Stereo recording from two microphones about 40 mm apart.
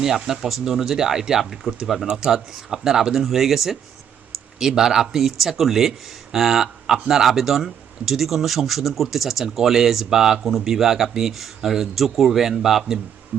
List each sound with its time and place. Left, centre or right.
0.0 s speech: centre